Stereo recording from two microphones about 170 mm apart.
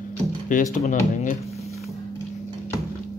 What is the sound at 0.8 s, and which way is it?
Speech, 45° left (ahead or behind).